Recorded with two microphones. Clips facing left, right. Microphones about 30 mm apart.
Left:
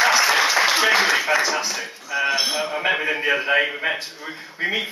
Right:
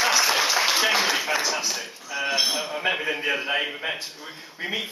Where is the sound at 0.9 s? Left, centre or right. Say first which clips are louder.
Left 5 dB; centre.